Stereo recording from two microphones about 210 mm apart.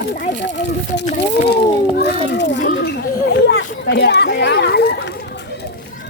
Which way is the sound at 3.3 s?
55° left (ahead or behind).